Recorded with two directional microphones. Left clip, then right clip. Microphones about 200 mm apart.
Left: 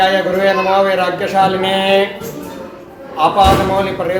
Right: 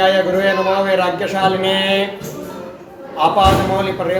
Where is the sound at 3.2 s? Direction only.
10° left (ahead or behind).